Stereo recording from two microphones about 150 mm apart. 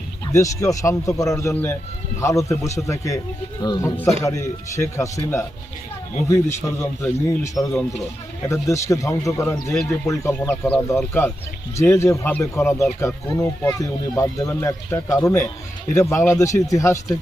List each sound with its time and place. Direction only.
0.3 s speech: 20° left (ahead or behind)